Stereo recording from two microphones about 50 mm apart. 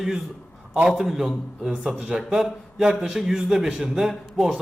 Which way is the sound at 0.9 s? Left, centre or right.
Centre.